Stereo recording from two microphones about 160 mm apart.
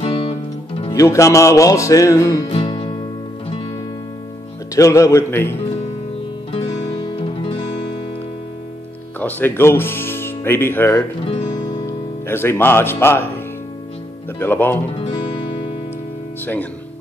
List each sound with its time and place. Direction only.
0.0 s music: 40° left (ahead or behind)
0.9 s music: 20° left (ahead or behind)
2.5 s music: 35° left (ahead or behind)
4.7 s speech: 20° left (ahead or behind)
7.1 s music: 30° left (ahead or behind)
9.2 s speech: 15° left (ahead or behind)
14.4 s speech: 15° left (ahead or behind)